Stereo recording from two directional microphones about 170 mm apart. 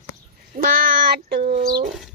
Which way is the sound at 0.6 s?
60° right (ahead or behind).